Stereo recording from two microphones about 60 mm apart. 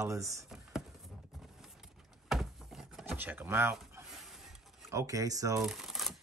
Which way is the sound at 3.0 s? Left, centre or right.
Right.